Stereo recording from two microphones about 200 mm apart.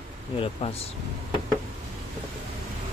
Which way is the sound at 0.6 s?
30° left (ahead or behind).